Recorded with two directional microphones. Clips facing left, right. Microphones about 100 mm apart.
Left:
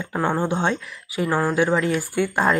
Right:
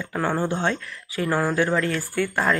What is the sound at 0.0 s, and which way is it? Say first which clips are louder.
Speech: left 2 dB; 20° left (ahead or behind).